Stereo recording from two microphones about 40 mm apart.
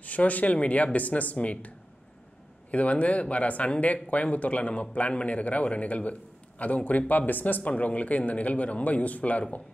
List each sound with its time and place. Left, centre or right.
0.0 s speech: left
2.7 s speech: left